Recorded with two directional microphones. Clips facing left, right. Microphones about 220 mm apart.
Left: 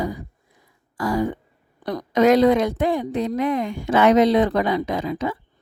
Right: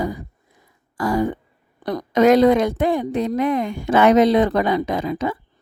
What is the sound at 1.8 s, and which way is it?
A woman's voice, 50° right (ahead or behind).